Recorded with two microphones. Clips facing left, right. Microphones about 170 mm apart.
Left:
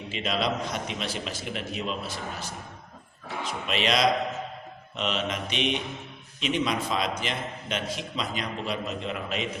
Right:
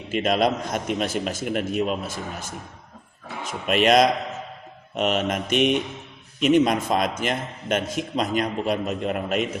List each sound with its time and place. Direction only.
0.1 s a man's voice: 50° right (ahead or behind)